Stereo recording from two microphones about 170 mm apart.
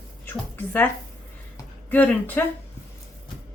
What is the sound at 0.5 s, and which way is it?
Speech, 10° left (ahead or behind).